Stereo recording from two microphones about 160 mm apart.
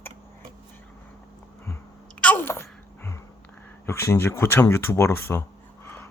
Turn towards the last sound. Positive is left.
turn(degrees=15)  # may be behind; listen again after turning